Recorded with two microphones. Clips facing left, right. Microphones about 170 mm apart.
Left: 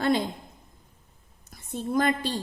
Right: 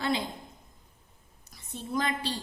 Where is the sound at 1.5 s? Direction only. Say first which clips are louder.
Left 6 dB; 50° left (ahead or behind).